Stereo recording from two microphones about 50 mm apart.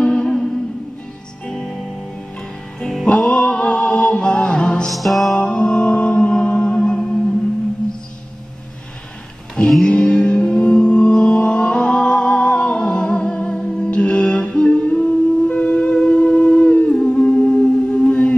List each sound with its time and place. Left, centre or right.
0.0 s music: centre
3.1 s music: left
4.8 s music: centre
5.3 s music: left
9.8 s music: left